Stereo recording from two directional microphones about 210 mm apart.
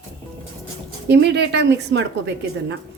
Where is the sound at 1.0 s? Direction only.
55° right (ahead or behind).